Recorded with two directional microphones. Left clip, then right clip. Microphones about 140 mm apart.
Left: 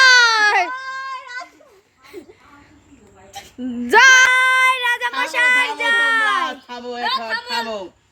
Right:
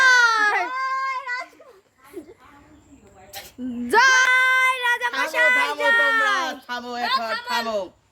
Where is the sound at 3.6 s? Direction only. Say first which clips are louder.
Left 5 dB; 25° left (ahead or behind).